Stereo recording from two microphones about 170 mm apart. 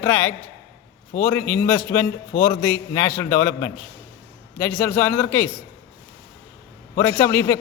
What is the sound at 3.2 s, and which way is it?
A man's voice, 15° left (ahead or behind).